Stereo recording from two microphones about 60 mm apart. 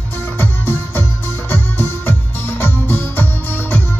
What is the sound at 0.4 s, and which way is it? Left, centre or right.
Music, left.